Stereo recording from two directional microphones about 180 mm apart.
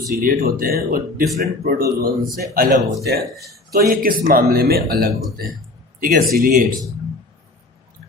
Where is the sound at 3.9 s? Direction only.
55° right (ahead or behind).